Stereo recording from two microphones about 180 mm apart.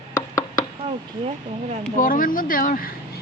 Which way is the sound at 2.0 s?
50° left (ahead or behind).